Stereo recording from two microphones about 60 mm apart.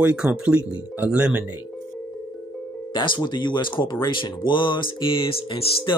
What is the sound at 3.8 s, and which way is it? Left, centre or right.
Speech, left.